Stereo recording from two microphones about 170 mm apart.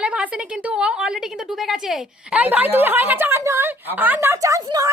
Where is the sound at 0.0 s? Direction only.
10° right (ahead or behind).